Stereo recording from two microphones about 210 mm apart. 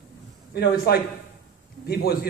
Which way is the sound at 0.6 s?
50° left (ahead or behind).